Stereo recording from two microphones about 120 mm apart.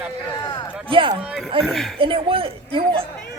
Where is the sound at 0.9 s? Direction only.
45° right (ahead or behind).